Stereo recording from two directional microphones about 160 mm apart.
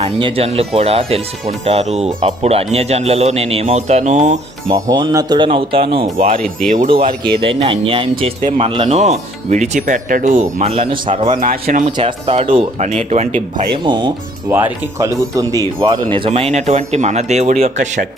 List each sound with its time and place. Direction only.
0.0 s speech: 35° right (ahead or behind)
4.7 s speech: 25° right (ahead or behind)
6.1 s speech: 50° right (ahead or behind)
6.7 s speech: 30° right (ahead or behind)
8.4 s speech: 55° right (ahead or behind)
8.6 s speech: 35° right (ahead or behind)
11.3 s speech: 65° right (ahead or behind)
11.9 s speech: 30° right (ahead or behind); by 13.7 s 50° right (ahead or behind)
13.8 s speech: 30° right (ahead or behind)
14.5 s speech: 15° right (ahead or behind)
15.8 s speech: 30° right (ahead or behind); by 18.1 s 50° right (ahead or behind)